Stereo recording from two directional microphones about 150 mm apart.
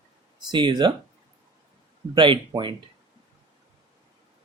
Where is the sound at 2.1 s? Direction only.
35° right (ahead or behind).